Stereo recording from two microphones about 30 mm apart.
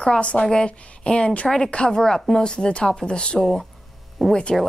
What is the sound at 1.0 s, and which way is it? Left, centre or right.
Speech, left.